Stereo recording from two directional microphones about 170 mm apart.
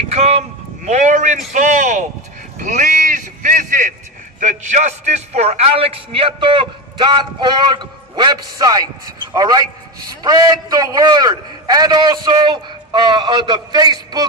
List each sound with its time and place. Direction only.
0.0 s speech: 35° right (ahead or behind)
2.6 s a sound: 45° right (ahead or behind)
4.4 s a man's voice: 45° right (ahead or behind); by 14.3 s 25° right (ahead or behind)